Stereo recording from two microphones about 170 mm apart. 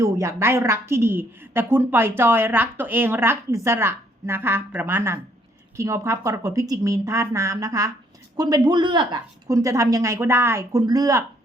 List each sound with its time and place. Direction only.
0.0 s a woman's voice: 15° right (ahead or behind)